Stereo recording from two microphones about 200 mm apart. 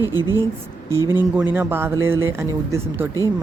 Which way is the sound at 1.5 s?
10° right (ahead or behind).